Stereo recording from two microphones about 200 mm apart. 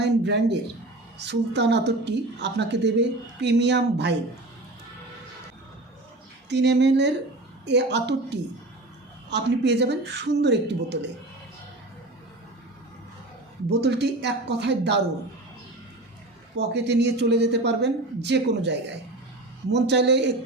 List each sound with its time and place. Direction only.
0.0 s a woman's voice: 55° right (ahead or behind)
6.5 s a woman's voice: 60° right (ahead or behind)
13.7 s a woman's voice: 60° right (ahead or behind)
16.6 s a woman's voice: 60° right (ahead or behind)